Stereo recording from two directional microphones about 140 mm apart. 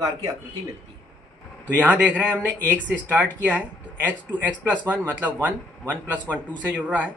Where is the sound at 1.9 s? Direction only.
10° right (ahead or behind).